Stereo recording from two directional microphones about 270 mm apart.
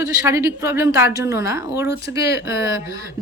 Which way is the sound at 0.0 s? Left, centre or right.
Centre.